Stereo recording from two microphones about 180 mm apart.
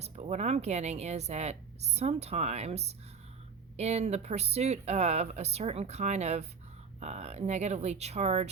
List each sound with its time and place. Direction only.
0.0 s a woman's voice: 35° right (ahead or behind)